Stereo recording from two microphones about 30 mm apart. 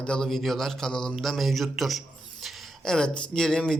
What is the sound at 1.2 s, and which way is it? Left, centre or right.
Speech, centre.